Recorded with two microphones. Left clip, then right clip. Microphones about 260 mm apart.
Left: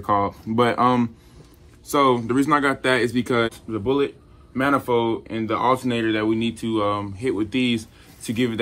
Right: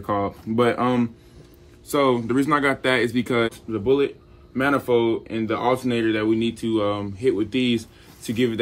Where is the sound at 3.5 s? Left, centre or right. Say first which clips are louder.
Right 2 dB; centre.